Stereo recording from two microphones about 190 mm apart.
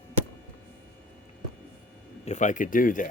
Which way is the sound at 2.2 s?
40° left (ahead or behind).